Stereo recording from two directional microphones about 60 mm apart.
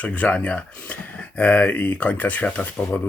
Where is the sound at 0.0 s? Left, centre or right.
Left.